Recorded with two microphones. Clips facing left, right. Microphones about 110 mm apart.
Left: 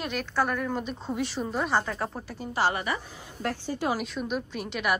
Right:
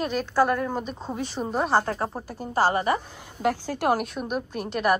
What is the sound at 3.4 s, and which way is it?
A woman's voice, 90° right.